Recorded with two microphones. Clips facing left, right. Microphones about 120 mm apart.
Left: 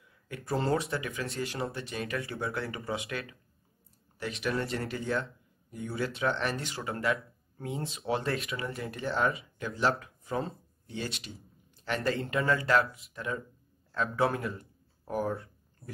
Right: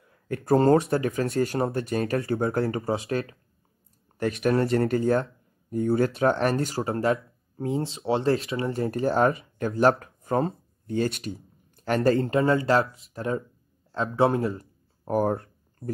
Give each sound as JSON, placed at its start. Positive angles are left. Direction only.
{"t": 0.1, "sound": "speech", "side_deg": -45}
{"t": 4.2, "sound": "speech", "side_deg": -50}
{"t": 12.1, "sound": "speech", "side_deg": -30}
{"t": 15.3, "sound": "a sound", "side_deg": -55}